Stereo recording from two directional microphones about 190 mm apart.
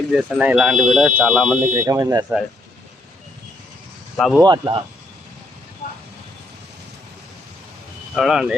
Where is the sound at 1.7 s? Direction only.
15° right (ahead or behind).